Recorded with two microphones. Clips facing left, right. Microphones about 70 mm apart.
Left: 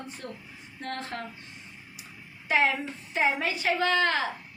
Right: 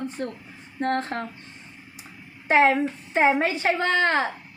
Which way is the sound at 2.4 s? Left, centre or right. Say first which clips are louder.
Right 7 dB; right.